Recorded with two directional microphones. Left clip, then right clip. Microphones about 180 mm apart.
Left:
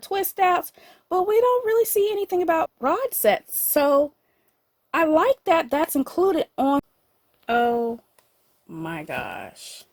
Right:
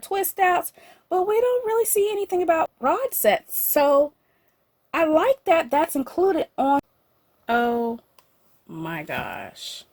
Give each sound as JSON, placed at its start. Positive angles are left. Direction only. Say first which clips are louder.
{"t": 0.0, "sound": "speech", "louder": "even", "side_deg": 40}
{"t": 7.4, "sound": "speech", "louder": "left 1 dB", "side_deg": 20}